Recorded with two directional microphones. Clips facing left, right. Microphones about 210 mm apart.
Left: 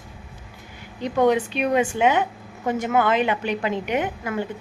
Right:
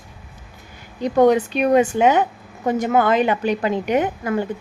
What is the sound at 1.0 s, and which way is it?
A woman's voice, 45° right (ahead or behind).